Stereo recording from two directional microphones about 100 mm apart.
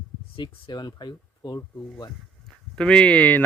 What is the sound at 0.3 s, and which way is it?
Speech, 45° left (ahead or behind).